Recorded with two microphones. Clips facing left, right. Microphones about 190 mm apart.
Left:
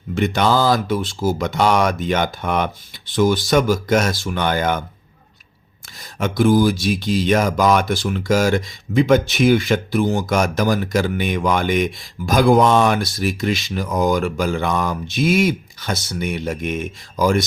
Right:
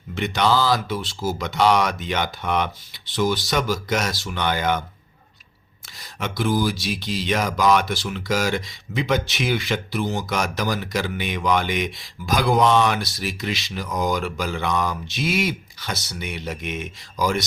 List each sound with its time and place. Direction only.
0.1 s speech: 50° left (ahead or behind)
6.1 s speech: 50° left (ahead or behind)